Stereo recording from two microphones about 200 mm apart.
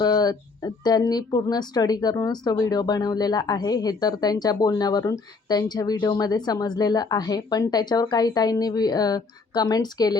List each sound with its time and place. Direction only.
0.0 s speech: 20° left (ahead or behind)